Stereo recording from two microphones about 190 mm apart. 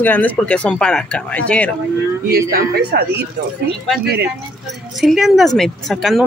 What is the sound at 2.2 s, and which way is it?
A woman's voice, 55° right (ahead or behind).